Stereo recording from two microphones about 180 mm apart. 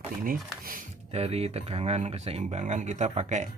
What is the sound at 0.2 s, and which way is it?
Speech, 50° right (ahead or behind).